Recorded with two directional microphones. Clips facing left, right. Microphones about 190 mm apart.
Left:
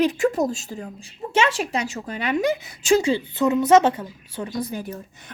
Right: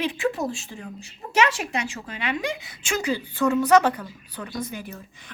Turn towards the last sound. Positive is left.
turn(degrees=40)  # may be behind; listen again after turning